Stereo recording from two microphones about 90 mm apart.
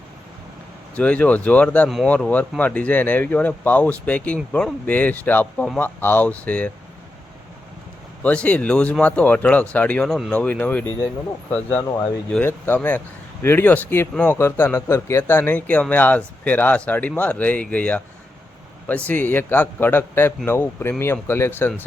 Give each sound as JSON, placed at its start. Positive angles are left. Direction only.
{"t": 0.9, "sound": "speech", "side_deg": 15}
{"t": 8.2, "sound": "speech", "side_deg": 15}
{"t": 10.1, "sound": "speech", "side_deg": 5}
{"t": 10.3, "sound": "speech", "side_deg": 15}
{"t": 11.8, "sound": "speech", "side_deg": 35}
{"t": 12.4, "sound": "speech", "side_deg": 20}